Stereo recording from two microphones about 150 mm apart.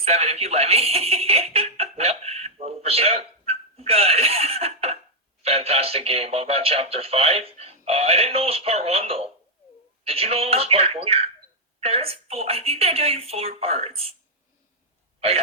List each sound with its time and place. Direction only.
0.0 s speech: 45° right (ahead or behind)